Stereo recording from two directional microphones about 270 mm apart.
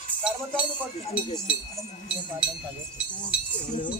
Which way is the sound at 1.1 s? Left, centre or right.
Left.